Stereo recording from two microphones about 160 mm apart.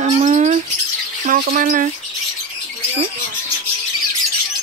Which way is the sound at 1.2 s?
55° right (ahead or behind).